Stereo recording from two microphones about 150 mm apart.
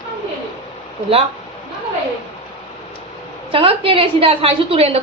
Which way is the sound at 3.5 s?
40° right (ahead or behind).